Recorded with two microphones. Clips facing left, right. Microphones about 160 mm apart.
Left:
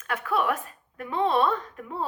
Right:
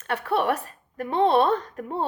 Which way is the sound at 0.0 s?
35° right (ahead or behind).